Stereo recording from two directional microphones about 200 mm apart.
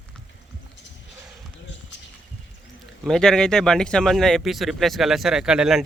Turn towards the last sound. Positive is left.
turn(degrees=-5)  # may be behind; listen again after turning